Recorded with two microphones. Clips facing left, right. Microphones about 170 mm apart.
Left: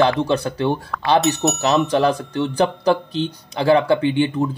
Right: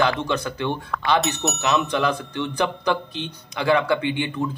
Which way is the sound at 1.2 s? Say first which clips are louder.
Left 6 dB; centre (ahead or behind).